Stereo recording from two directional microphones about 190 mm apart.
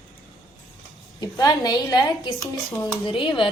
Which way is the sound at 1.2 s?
20° left (ahead or behind).